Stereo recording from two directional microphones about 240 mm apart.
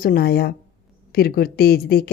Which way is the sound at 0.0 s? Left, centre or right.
Left.